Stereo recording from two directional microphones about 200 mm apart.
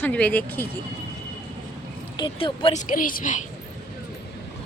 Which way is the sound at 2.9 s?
45° left (ahead or behind).